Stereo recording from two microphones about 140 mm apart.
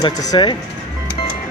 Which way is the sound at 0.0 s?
35° left (ahead or behind).